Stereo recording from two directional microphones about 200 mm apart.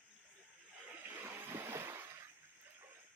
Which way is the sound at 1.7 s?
15° right (ahead or behind).